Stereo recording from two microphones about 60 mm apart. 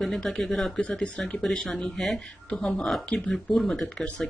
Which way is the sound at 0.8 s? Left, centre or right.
Centre.